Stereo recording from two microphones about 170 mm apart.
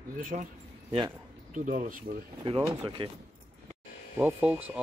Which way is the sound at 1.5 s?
50° right (ahead or behind).